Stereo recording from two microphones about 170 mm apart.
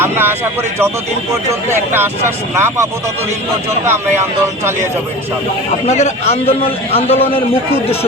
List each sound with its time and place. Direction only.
0.0 s speech: 15° right (ahead or behind)
1.9 s speech: 15° right (ahead or behind)
5.8 s a man's voice: 40° left (ahead or behind)